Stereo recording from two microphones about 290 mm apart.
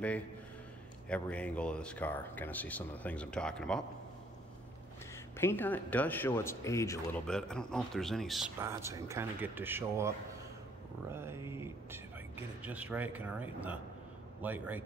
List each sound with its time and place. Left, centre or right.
1.0 s speech: centre
5.4 s speech: centre
11.1 s a sound: centre
12.6 s speech: centre